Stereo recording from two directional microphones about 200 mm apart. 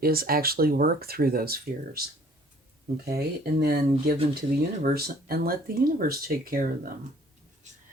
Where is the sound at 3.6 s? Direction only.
50° right (ahead or behind).